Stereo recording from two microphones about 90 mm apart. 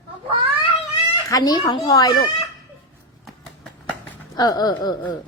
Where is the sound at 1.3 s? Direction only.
50° left (ahead or behind).